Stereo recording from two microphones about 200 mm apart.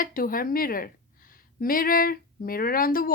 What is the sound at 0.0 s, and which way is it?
A woman's voice, 45° left (ahead or behind).